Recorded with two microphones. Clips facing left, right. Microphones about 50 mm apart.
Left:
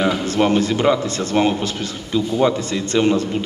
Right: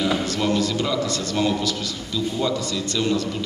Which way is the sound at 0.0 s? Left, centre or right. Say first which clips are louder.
Left 5 dB; left.